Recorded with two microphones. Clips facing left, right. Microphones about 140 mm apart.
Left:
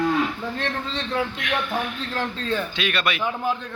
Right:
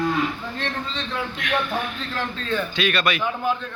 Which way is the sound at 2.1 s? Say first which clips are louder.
Even; 35° left (ahead or behind).